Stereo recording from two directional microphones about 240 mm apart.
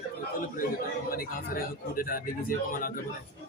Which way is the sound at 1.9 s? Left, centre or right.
Left.